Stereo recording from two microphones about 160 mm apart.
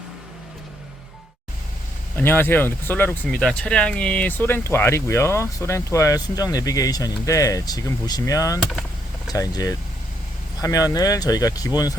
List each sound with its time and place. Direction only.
2.1 s speech: 10° left (ahead or behind)